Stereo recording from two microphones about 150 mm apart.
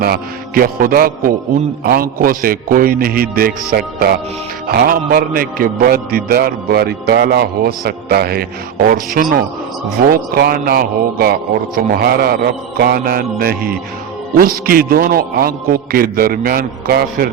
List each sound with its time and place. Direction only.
0.0 s a man's voice: 85° right